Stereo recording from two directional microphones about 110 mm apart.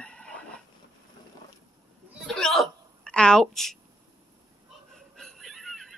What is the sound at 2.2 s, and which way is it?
Hiccup, 5° left (ahead or behind).